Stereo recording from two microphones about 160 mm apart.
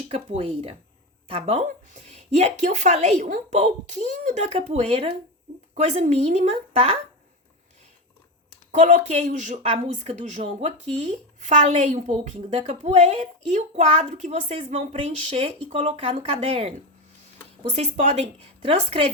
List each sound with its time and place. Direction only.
0.1 s a woman's voice: 40° right (ahead or behind)
8.8 s a woman's voice: 50° right (ahead or behind)